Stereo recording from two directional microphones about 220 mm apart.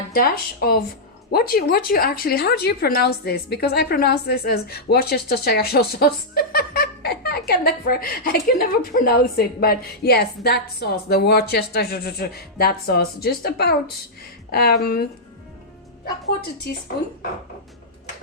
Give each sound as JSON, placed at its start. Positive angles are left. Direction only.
{"t": 0.1, "sound": "a woman's voice", "side_deg": 45}